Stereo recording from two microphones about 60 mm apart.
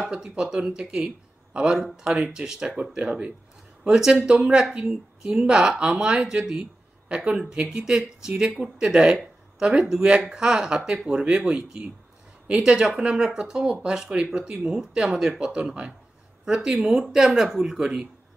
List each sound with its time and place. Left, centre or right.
0.0 s a woman's voice: centre
6.6 s a sound: centre
7.5 s a woman's voice: centre